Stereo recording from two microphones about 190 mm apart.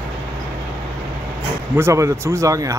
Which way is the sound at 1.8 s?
15° right (ahead or behind).